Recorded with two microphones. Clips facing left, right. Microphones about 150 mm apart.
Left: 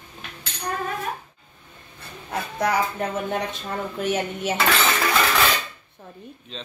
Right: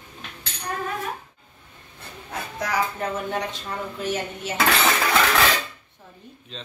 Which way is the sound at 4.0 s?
60° left (ahead or behind).